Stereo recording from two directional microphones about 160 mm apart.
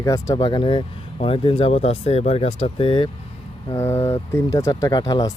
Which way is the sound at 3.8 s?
15° left (ahead or behind).